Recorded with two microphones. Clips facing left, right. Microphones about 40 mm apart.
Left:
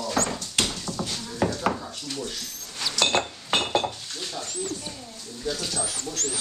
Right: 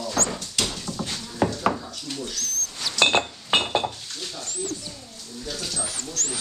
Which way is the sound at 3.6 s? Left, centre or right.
Centre.